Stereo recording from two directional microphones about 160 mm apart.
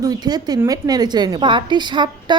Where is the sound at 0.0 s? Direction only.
25° right (ahead or behind).